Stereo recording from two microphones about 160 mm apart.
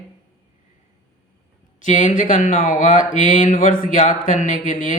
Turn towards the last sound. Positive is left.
turn(degrees=50)  # may be behind; listen again after turning